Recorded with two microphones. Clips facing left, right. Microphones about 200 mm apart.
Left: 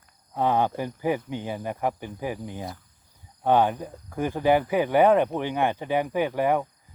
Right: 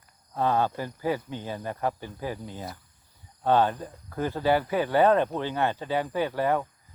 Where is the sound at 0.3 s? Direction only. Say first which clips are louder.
Left 2 dB; 15° left (ahead or behind).